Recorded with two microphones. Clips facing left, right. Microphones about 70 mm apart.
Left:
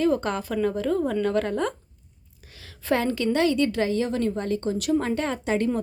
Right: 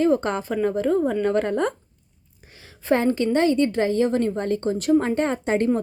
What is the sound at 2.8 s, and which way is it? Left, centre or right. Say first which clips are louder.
A woman's voice: right 3 dB; right.